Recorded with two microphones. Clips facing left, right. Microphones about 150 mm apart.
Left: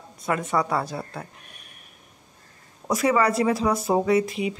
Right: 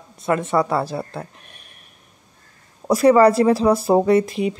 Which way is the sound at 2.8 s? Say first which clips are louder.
Right 8 dB; 35° right (ahead or behind).